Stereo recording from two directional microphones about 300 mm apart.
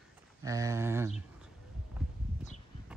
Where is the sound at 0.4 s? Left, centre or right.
Centre.